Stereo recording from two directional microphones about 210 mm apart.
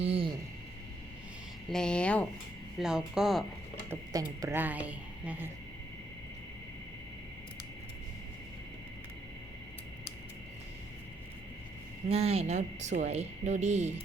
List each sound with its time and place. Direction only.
0.0 s a sound: 25° right (ahead or behind)
1.7 s speech: 5° left (ahead or behind)
3.8 s a woman's voice: 15° right (ahead or behind)
12.0 s speech: 30° right (ahead or behind)